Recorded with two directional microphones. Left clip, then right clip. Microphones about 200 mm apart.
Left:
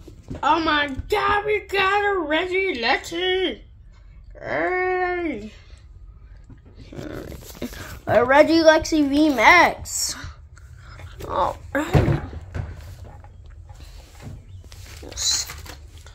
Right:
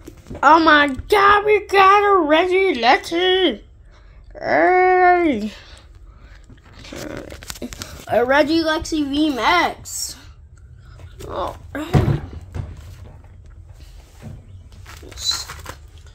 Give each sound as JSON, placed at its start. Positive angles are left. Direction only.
{"t": 0.4, "sound": "child singing", "side_deg": -35}
{"t": 7.1, "sound": "speech", "side_deg": 0}
{"t": 8.6, "sound": "a woman's voice", "side_deg": 10}
{"t": 10.0, "sound": "whispering", "side_deg": 20}
{"t": 11.1, "sound": "a sound", "side_deg": 5}